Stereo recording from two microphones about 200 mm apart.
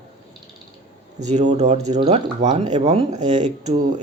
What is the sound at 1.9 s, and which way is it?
Speech, 30° right (ahead or behind).